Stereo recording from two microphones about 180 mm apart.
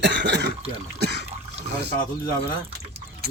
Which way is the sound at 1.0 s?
65° right (ahead or behind).